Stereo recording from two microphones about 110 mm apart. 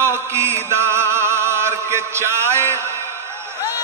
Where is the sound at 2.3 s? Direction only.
25° right (ahead or behind).